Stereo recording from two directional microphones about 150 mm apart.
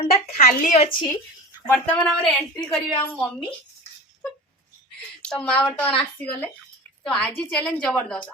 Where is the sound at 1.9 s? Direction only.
10° left (ahead or behind).